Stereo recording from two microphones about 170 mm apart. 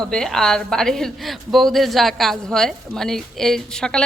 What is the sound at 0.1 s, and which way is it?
A woman's voice, 5° left (ahead or behind).